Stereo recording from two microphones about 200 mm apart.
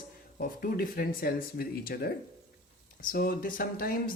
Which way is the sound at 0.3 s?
45° left (ahead or behind).